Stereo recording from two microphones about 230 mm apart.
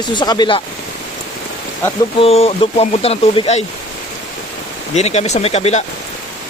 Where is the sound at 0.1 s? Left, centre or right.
Centre.